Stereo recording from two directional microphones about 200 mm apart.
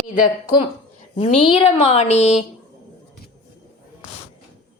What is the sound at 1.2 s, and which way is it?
Speech, 30° left (ahead or behind).